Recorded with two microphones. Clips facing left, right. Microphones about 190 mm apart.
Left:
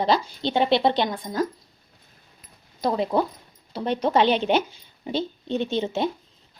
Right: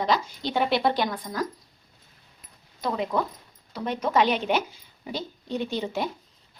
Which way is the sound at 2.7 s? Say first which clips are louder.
Left 4 dB; 35° left (ahead or behind).